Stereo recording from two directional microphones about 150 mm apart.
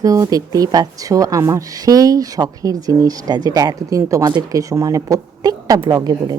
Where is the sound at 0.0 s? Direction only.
25° right (ahead or behind).